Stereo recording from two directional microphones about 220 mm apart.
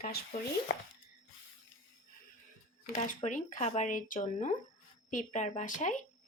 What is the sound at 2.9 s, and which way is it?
Speech, 35° left (ahead or behind).